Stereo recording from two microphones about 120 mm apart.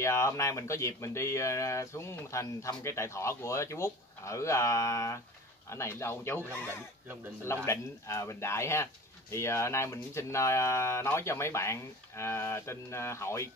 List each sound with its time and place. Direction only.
0.0 s speech: 25° left (ahead or behind)